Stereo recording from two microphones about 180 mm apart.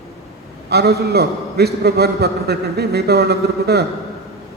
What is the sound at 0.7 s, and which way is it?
A man's voice, 65° right (ahead or behind).